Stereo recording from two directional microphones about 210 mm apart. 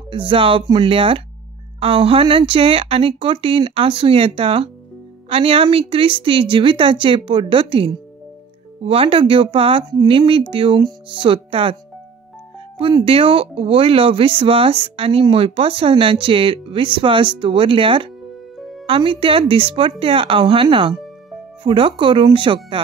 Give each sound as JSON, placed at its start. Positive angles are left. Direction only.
{"t": 0.1, "sound": "speech", "side_deg": -25}